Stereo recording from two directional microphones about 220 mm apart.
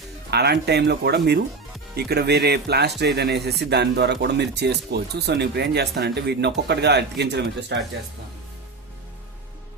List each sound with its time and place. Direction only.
0.3 s speech: 50° right (ahead or behind)